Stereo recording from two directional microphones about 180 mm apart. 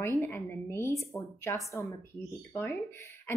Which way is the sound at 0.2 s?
15° left (ahead or behind).